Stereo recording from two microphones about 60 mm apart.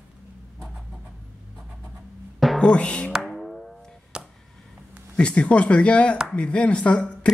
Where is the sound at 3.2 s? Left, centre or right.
Centre.